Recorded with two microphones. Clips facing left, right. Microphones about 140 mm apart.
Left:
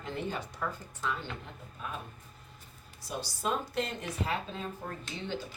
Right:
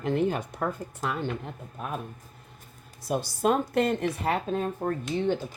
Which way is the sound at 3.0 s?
55° right (ahead or behind).